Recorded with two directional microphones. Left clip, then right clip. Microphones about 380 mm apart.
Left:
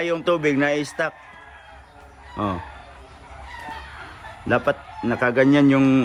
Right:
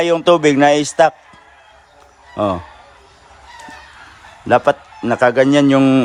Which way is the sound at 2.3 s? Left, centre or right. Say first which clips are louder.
Right 8 dB; centre.